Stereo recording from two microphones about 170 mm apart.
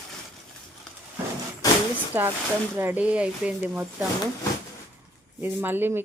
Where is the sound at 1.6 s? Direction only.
20° left (ahead or behind).